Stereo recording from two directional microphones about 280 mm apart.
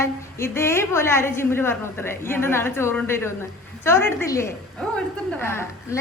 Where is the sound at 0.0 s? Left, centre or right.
Centre.